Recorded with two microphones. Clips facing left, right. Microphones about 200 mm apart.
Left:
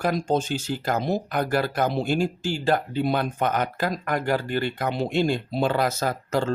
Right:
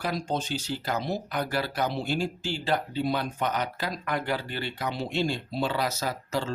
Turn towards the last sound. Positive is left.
turn(degrees=55)  # may be behind; listen again after turning